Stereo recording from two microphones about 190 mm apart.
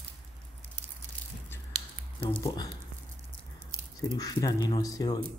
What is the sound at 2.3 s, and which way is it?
Speech, 20° left (ahead or behind).